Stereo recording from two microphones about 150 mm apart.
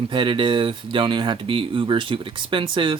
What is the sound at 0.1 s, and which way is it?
Speech, 35° right (ahead or behind).